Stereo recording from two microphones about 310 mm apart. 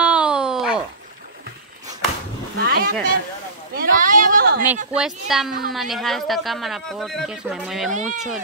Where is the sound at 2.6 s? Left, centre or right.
Right.